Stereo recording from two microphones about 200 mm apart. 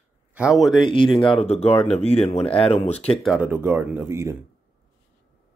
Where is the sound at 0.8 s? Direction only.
25° left (ahead or behind).